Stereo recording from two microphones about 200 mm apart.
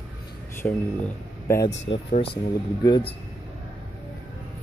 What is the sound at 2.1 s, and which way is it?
Speech, 25° left (ahead or behind).